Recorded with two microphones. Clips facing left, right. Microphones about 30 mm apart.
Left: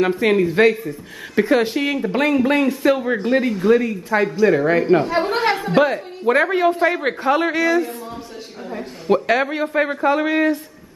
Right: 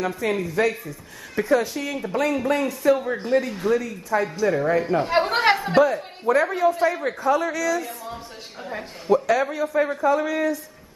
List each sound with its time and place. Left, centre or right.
0.0 s a man's voice: left
5.3 s a woman's voice: centre
5.8 s a man's voice: left
8.6 s a man's voice: centre
9.1 s a man's voice: left